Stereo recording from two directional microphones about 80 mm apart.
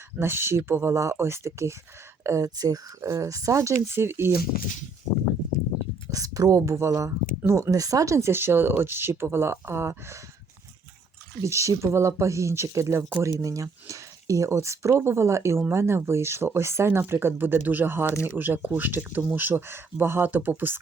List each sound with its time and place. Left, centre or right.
0.2 s speech: right
6.1 s speech: right
11.4 s speech: right
18.0 s speech: left
18.3 s speech: right